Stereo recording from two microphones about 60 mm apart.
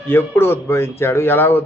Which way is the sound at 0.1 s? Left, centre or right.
Left.